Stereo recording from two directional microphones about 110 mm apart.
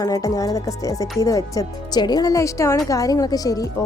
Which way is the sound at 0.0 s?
30° left (ahead or behind).